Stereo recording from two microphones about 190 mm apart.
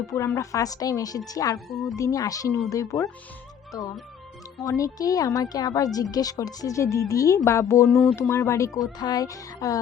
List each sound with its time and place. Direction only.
0.3 s a woman's voice: 20° left (ahead or behind)
1.5 s a woman's voice: centre (ahead or behind)
2.0 s speech: 20° left (ahead or behind)